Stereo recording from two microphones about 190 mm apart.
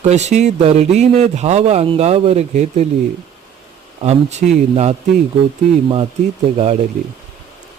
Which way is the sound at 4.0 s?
35° right (ahead or behind).